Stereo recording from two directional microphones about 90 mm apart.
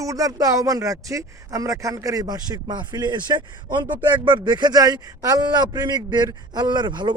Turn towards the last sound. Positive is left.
turn(degrees=-55)  # may be behind; listen again after turning